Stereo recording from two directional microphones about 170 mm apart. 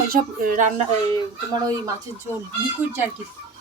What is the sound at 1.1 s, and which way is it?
Speech, 25° right (ahead or behind).